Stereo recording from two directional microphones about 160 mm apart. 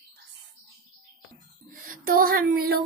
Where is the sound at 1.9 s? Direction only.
65° right (ahead or behind).